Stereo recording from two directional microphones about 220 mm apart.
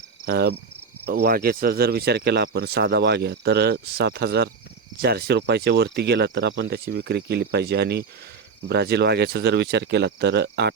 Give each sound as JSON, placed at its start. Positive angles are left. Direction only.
{"t": 0.3, "sound": "speech", "side_deg": -45}